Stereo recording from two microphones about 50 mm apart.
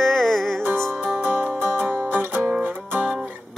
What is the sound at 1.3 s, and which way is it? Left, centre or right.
Music, right.